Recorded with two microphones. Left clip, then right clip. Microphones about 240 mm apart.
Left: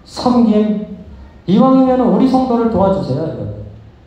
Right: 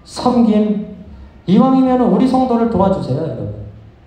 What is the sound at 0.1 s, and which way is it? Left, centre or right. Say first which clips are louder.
A man's voice: left 1 dB; right.